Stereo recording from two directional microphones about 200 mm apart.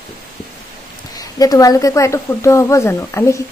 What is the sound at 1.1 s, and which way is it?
Speech, 20° left (ahead or behind).